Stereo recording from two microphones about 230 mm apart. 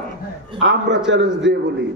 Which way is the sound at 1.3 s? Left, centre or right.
Centre.